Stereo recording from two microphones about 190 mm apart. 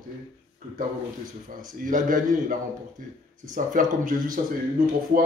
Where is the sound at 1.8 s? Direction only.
45° right (ahead or behind).